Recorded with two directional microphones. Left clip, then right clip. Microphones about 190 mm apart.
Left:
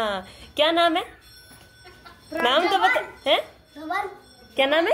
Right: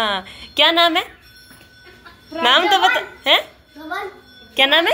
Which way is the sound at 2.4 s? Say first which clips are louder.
Right 6 dB; 5° left (ahead or behind).